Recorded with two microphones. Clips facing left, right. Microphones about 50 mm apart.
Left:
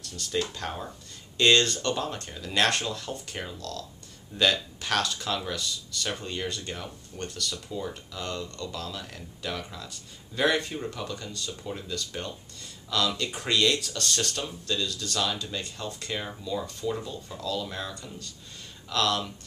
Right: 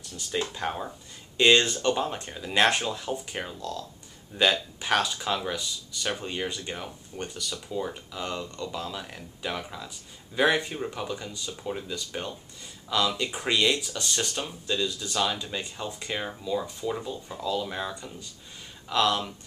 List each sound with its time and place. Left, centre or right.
0.0 s speech: centre